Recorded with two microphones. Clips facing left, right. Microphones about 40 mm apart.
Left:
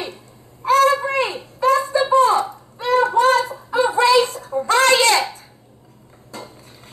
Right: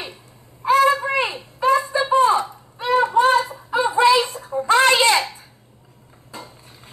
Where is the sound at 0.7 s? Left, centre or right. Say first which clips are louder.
Left 1 dB; centre.